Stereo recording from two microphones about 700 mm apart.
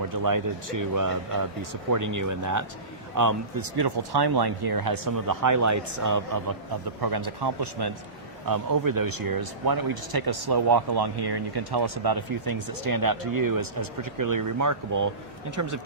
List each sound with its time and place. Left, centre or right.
0.1 s a man's voice: right